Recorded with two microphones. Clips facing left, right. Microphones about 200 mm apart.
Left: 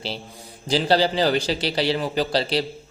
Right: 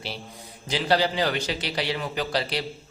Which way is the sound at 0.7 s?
30° left (ahead or behind).